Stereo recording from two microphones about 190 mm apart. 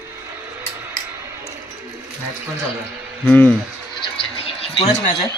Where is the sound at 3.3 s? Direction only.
10° left (ahead or behind).